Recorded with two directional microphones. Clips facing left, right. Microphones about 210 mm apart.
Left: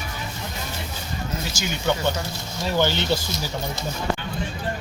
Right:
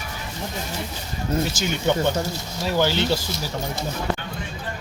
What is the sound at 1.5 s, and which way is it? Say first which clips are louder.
Speech: right 3 dB; 55° right (ahead or behind).